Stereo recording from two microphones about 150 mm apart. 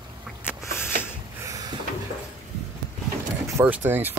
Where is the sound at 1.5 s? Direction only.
25° right (ahead or behind).